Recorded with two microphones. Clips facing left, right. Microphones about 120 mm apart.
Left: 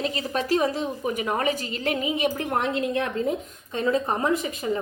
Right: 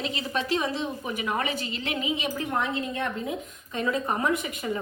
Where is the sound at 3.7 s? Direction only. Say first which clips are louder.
Left 3 dB; 30° left (ahead or behind).